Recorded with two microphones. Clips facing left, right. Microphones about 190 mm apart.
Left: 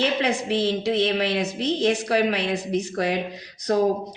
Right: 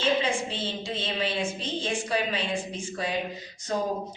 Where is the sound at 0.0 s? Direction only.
75° left (ahead or behind).